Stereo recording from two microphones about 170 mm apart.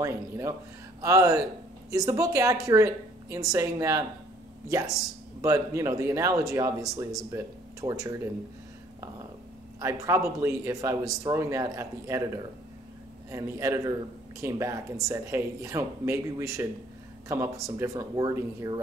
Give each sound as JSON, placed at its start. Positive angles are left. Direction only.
{"t": 0.0, "sound": "speech", "side_deg": -15}
{"t": 9.8, "sound": "speech", "side_deg": -15}
{"t": 13.3, "sound": "speech", "side_deg": -15}